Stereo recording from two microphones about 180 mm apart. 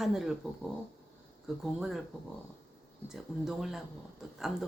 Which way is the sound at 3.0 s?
Centre (ahead or behind).